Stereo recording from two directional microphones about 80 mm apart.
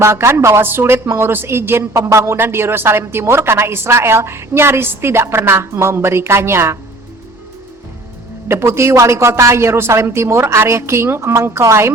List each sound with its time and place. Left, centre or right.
0.0 s a woman's voice: right
8.4 s a woman's voice: right